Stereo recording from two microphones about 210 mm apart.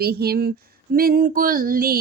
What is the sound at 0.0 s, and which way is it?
A woman's voice, 45° right (ahead or behind).